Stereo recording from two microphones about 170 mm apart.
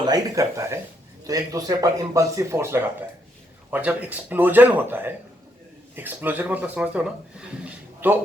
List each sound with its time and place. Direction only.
0.0 s speech: 20° right (ahead or behind)